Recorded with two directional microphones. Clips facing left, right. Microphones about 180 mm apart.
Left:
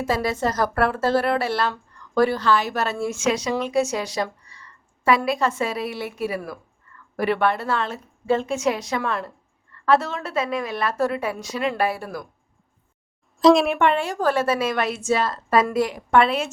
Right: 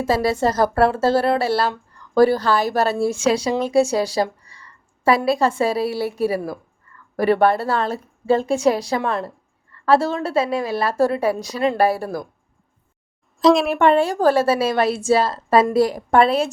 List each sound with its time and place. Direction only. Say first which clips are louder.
0.0 s a woman's voice: right 4 dB; 30° right (ahead or behind)
13.4 s a woman's voice: even; centre (ahead or behind)
13.7 s a woman's voice: right 5 dB; 35° right (ahead or behind)